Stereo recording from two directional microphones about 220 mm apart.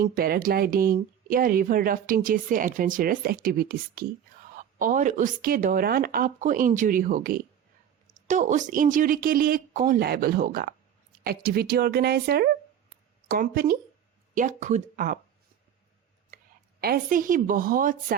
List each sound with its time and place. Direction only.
0.0 s speech: 40° right (ahead or behind)
16.8 s speech: 40° right (ahead or behind)